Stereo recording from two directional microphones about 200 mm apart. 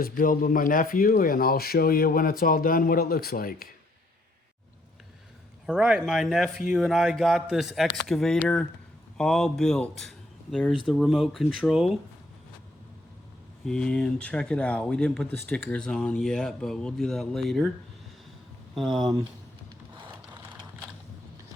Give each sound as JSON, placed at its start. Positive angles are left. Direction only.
{"t": 0.0, "sound": "speech", "side_deg": 45}
{"t": 5.6, "sound": "speech", "side_deg": -5}
{"t": 13.7, "sound": "speech", "side_deg": 5}
{"t": 18.7, "sound": "speech", "side_deg": 0}